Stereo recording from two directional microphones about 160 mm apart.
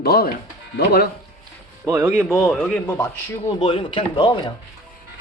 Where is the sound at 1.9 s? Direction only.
15° right (ahead or behind).